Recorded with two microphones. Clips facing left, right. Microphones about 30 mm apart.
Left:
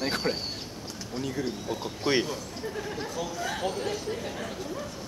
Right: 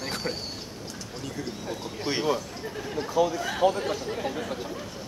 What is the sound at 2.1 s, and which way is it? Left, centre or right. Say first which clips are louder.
Speech: even; centre.